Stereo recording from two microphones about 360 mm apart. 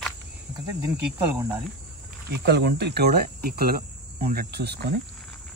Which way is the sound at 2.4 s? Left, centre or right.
Right.